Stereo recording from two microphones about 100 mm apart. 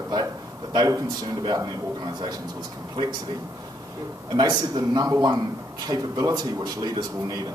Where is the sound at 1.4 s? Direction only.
40° right (ahead or behind).